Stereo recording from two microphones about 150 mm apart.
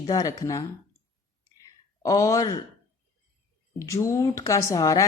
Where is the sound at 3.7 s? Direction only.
20° left (ahead or behind).